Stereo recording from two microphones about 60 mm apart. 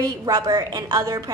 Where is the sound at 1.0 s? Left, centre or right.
Right.